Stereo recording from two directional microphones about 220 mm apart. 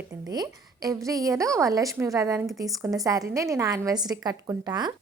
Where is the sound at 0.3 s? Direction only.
15° right (ahead or behind).